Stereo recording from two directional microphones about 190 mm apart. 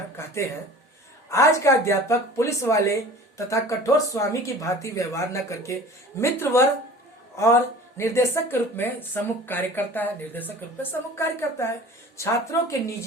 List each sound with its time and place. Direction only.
0.2 s speech: 15° left (ahead or behind)